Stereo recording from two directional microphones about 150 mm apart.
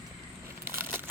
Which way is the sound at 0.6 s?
15° right (ahead or behind).